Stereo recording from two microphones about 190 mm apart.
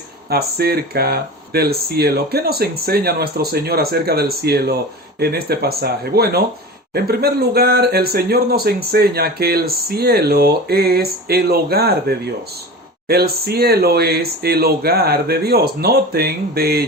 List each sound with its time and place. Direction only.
0.3 s speech: 55° right (ahead or behind)